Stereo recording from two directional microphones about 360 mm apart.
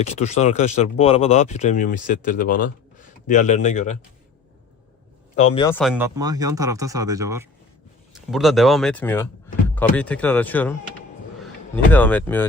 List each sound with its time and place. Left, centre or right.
0.0 s speech: centre
5.5 s speech: centre
11.9 s speech: centre